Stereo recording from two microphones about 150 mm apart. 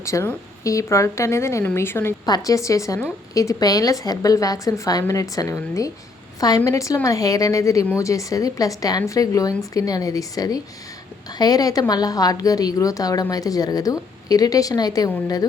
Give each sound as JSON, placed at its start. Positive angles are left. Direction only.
{"t": 0.0, "sound": "a woman's voice", "side_deg": 20}